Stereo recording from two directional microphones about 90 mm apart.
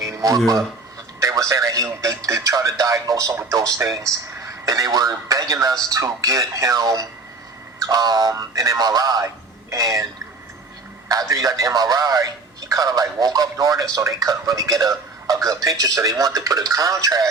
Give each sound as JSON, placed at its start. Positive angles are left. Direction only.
{"t": 0.1, "sound": "speech", "side_deg": -40}
{"t": 11.1, "sound": "speech", "side_deg": -40}